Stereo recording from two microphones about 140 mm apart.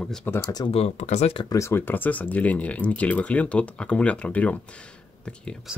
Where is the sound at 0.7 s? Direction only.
45° left (ahead or behind).